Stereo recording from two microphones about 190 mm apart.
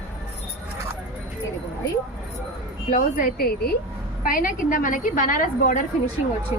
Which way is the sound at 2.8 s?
45° left (ahead or behind).